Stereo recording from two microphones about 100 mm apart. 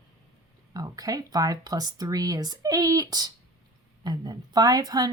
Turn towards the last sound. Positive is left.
turn(degrees=-40)  # may be behind; listen again after turning